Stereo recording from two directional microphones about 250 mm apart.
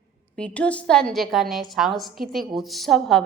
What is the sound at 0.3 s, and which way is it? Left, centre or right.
A woman's voice, centre.